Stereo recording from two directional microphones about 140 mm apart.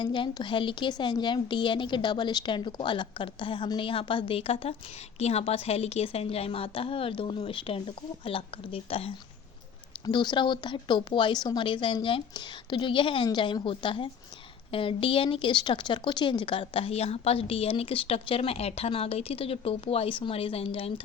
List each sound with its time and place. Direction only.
0.0 s a woman's voice: 35° left (ahead or behind)